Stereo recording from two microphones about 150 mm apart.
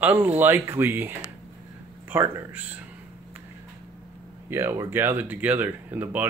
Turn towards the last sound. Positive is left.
turn(degrees=-10)  # may be behind; listen again after turning